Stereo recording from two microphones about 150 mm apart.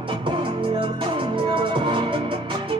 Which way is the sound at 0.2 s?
35° right (ahead or behind).